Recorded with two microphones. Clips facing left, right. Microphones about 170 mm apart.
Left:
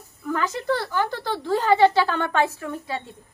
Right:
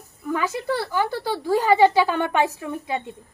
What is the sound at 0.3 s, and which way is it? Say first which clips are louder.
A woman's voice: even; 10° right (ahead or behind).